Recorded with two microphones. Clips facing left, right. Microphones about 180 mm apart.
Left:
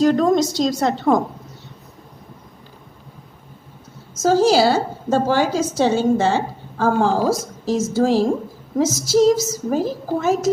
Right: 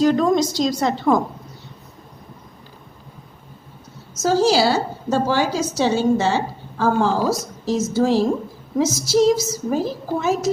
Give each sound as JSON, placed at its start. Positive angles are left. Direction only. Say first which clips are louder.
{"t": 0.0, "sound": "a woman's voice", "louder": "left 1 dB", "side_deg": 45}
{"t": 4.2, "sound": "a woman's voice", "louder": "left 2 dB", "side_deg": 50}